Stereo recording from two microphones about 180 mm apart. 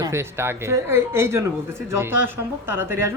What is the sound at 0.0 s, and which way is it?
Speech, 15° right (ahead or behind).